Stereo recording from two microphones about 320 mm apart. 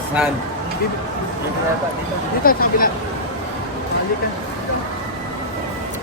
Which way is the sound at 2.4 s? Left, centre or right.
Left.